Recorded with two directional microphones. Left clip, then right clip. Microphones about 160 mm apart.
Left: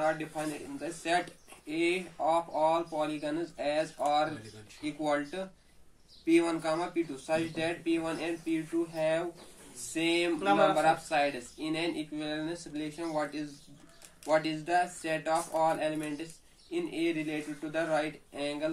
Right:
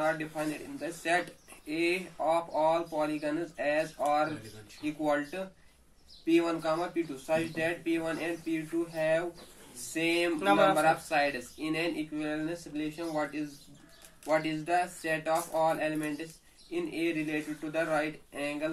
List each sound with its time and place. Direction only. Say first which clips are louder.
0.0 s speech: even; 10° right (ahead or behind)
10.4 s speech: right 1 dB; 40° right (ahead or behind)
10.7 s speech: right 1 dB; 15° right (ahead or behind)